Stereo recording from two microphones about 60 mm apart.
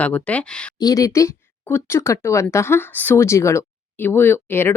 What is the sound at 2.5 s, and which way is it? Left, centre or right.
Speech, left.